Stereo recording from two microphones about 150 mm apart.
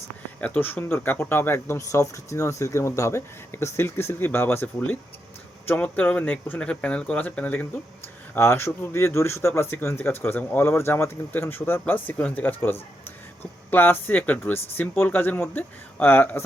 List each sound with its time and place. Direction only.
0.3 s speech: 10° left (ahead or behind)